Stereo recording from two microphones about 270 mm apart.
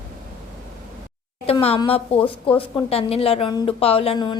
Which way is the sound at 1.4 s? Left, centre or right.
Left.